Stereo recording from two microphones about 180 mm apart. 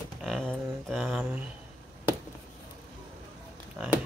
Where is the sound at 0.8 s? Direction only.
Centre (ahead or behind).